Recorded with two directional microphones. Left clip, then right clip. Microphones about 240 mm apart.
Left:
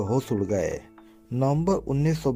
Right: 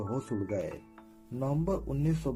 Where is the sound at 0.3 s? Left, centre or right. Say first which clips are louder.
Left 8 dB; left.